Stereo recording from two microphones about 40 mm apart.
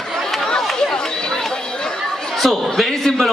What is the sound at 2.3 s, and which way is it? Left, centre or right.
Speech, centre.